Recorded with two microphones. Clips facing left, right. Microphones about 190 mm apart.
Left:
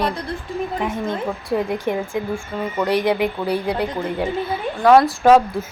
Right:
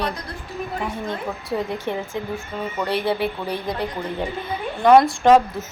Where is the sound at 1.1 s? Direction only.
15° left (ahead or behind).